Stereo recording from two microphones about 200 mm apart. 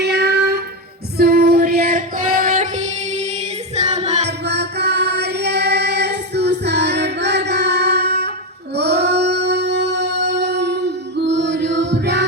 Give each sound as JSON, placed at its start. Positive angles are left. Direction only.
{"t": 0.0, "sound": "child singing", "side_deg": -55}
{"t": 1.2, "sound": "singing", "side_deg": -50}
{"t": 3.8, "sound": "music", "side_deg": -30}
{"t": 4.3, "sound": "music", "side_deg": -55}
{"t": 8.7, "sound": "child singing", "side_deg": -55}